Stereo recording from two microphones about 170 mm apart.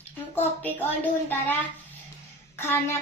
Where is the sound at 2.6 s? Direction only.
15° left (ahead or behind).